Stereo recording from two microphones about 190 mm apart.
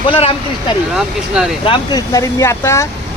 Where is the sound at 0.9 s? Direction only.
5° right (ahead or behind).